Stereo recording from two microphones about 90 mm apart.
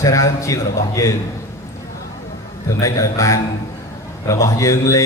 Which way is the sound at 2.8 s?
35° left (ahead or behind).